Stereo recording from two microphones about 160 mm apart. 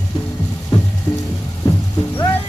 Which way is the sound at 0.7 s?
30° left (ahead or behind).